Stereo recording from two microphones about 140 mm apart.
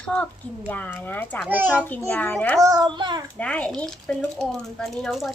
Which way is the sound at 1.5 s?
10° right (ahead or behind).